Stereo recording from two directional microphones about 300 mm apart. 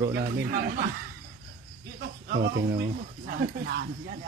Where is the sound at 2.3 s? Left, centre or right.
Right.